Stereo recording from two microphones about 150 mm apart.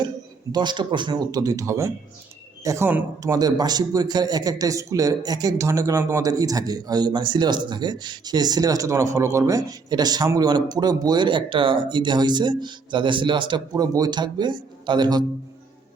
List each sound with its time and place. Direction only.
0.5 s a man's voice: 30° right (ahead or behind)